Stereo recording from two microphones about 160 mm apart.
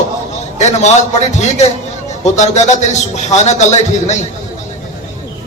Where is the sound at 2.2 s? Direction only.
45° left (ahead or behind).